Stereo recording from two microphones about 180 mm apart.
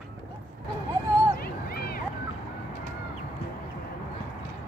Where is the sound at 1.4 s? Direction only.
55° left (ahead or behind).